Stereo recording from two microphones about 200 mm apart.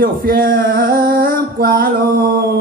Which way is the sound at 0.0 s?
45° right (ahead or behind).